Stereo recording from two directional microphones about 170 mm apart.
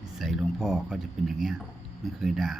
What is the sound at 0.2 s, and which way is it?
Speech, centre (ahead or behind).